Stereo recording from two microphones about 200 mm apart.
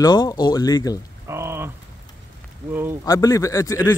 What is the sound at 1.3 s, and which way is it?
Rain on surface, 10° right (ahead or behind).